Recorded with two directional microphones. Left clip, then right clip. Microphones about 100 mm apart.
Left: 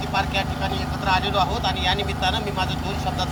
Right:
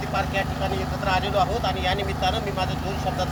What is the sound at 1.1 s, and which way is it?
Speech, 30° right (ahead or behind).